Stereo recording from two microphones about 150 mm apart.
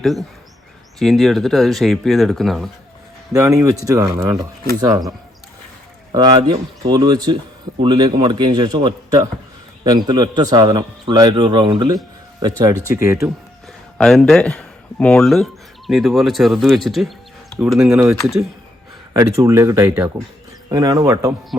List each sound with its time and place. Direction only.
0.0 s speech: centre (ahead or behind)
3.3 s a man's voice: 20° right (ahead or behind)
6.1 s a man's voice: 35° right (ahead or behind)
14.0 s speech: 5° left (ahead or behind)
17.9 s a man's voice: 20° right (ahead or behind)